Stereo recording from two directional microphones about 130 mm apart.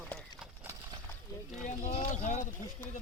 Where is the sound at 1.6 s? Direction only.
80° left.